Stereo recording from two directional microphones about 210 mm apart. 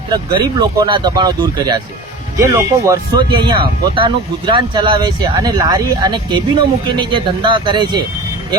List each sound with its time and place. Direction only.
0.1 s speech: 20° right (ahead or behind)